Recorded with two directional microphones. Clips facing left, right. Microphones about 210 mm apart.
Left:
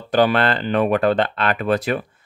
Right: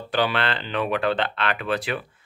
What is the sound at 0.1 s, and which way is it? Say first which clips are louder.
Speech: left 7 dB; 45° left (ahead or behind).